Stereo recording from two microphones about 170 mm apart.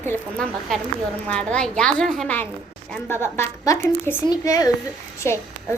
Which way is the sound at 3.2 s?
15° left (ahead or behind).